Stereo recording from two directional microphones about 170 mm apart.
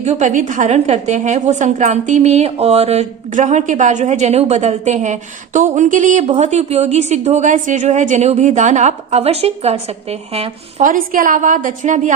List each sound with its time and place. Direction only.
0.0 s a woman's voice: 45° right (ahead or behind)
10.8 s a woman's voice: 50° right (ahead or behind)